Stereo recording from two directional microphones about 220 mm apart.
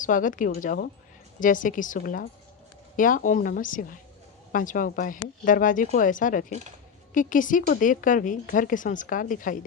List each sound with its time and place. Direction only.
0.0 s a woman's voice: 35° left (ahead or behind)